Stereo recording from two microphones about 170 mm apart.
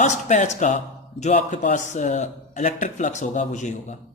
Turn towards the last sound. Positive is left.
turn(degrees=45)  # may be behind; listen again after turning